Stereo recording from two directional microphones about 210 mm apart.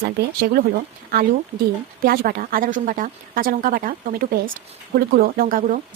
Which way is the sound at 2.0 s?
45° right (ahead or behind).